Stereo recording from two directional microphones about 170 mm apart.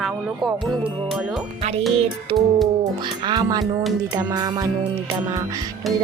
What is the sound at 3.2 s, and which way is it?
A child's voice, 25° right (ahead or behind).